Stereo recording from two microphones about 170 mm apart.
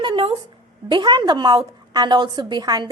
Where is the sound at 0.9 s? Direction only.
25° right (ahead or behind).